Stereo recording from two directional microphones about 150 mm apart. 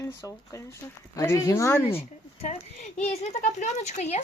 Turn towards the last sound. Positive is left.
turn(degrees=50)  # may be behind; listen again after turning